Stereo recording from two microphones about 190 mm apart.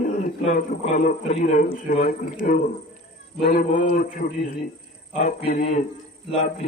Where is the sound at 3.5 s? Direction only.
40° left (ahead or behind).